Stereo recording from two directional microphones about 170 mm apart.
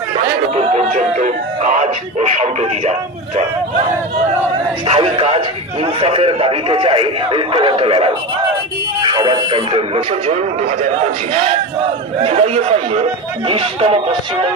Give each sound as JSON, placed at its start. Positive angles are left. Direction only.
{"t": 0.6, "sound": "speech", "side_deg": -40}
{"t": 4.8, "sound": "a man's voice", "side_deg": -35}
{"t": 12.2, "sound": "a man's voice", "side_deg": -35}